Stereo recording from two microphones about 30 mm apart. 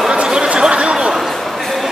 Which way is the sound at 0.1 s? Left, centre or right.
Right.